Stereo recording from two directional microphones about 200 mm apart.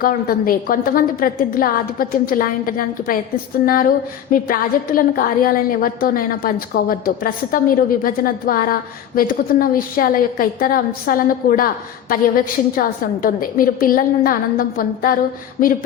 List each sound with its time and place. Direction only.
0.0 s a woman's voice: 45° left (ahead or behind)